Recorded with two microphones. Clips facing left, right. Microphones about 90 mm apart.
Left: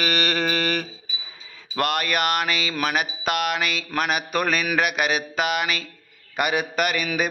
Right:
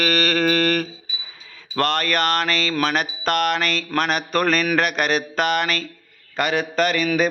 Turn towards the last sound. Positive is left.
turn(degrees=5)  # may be behind; listen again after turning